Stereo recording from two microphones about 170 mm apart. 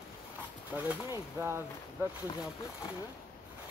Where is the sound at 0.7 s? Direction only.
10° right (ahead or behind).